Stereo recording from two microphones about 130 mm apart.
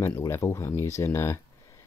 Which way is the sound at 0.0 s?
20° left (ahead or behind).